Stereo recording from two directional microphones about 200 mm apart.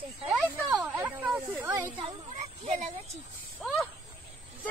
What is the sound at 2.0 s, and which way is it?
Speech, 35° right (ahead or behind).